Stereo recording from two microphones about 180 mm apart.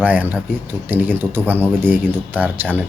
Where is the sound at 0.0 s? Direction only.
10° right (ahead or behind).